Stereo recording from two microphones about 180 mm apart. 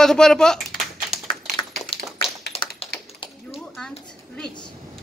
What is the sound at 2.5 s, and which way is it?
Tap, 35° left (ahead or behind).